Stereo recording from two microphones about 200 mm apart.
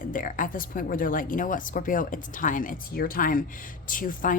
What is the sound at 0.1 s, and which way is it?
Speech, 45° left (ahead or behind).